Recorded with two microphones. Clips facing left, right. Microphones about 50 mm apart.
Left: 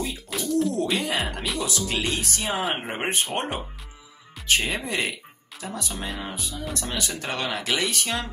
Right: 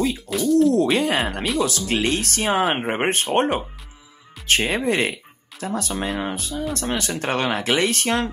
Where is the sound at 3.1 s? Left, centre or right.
Right.